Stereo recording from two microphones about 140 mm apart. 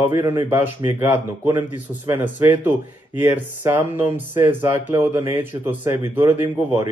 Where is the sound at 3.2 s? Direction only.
15° right (ahead or behind).